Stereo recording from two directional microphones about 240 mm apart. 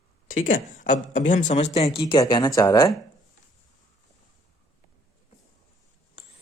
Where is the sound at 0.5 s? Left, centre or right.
Left; by 2.9 s centre.